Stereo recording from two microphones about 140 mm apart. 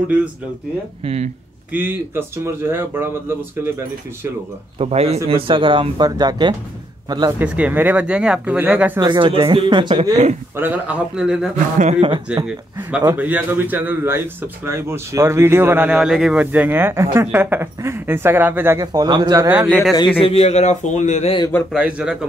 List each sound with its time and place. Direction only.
1.0 s speech: 50° right (ahead or behind)
1.7 s a man's voice: 15° right (ahead or behind)
4.7 s speech: 45° right (ahead or behind); by 7.3 s 30° right (ahead or behind)
7.3 s a man's voice: 10° right (ahead or behind)
9.0 s speech: 35° right (ahead or behind)
10.5 s a man's voice: 15° right (ahead or behind)
11.8 s speech: 50° right (ahead or behind)
12.4 s a man's voice: 10° right (ahead or behind)
16.0 s a man's voice: centre (ahead or behind)
18.8 s speech: 30° right (ahead or behind)
19.9 s a man's voice: 35° left (ahead or behind); by 21.3 s 60° left (ahead or behind)
21.7 s a man's voice: 5° right (ahead or behind)